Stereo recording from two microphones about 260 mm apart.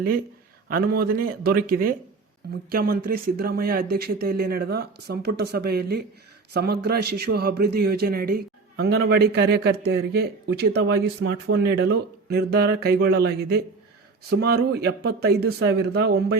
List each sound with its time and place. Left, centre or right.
1.0 s speech: right